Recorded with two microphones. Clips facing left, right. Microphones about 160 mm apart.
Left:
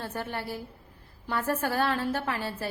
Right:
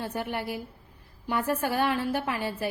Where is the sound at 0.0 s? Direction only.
15° right (ahead or behind).